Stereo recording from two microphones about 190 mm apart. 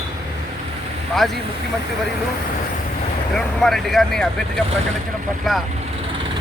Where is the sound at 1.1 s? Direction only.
Centre (ahead or behind).